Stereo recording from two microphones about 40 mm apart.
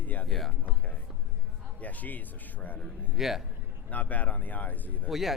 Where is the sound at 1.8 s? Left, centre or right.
Left.